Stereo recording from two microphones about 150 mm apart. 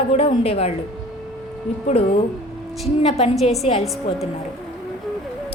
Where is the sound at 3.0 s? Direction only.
40° left (ahead or behind).